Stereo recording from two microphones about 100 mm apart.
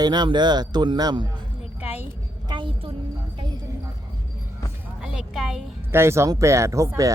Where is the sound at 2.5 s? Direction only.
55° right (ahead or behind).